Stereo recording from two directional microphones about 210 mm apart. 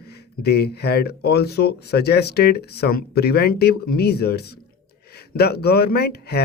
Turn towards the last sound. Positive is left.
turn(degrees=50)  # may be behind; listen again after turning